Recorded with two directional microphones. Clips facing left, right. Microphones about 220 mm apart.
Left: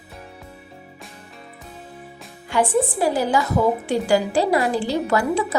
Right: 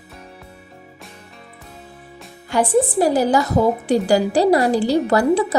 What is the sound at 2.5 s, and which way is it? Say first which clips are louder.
A woman's voice: right 3 dB; 40° right (ahead or behind).